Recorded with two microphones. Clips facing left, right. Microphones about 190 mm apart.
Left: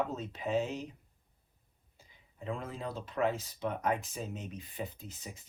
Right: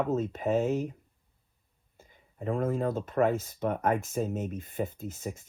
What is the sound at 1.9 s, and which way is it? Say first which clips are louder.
Speech: right 7 dB; 50° right (ahead or behind).